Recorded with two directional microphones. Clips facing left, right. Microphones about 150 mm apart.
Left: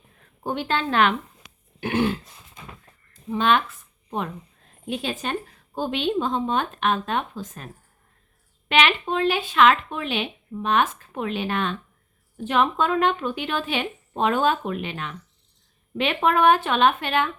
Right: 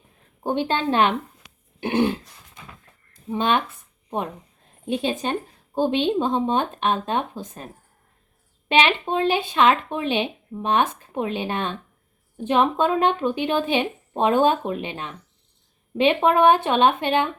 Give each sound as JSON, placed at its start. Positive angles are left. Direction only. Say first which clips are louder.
{"t": 0.4, "sound": "speech", "louder": "right 3 dB", "side_deg": -20}
{"t": 3.2, "sound": "speech", "louder": "left 1 dB", "side_deg": -25}
{"t": 8.8, "sound": "speech", "louder": "right 1 dB", "side_deg": -25}